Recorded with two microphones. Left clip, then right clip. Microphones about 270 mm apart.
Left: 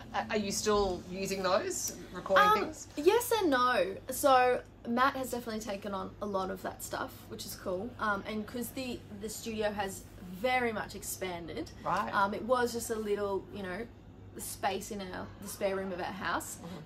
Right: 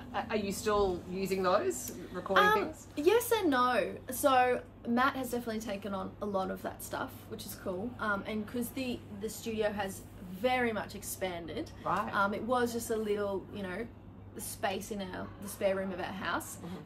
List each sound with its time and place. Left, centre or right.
0.1 s a woman's voice: left
2.3 s speech: centre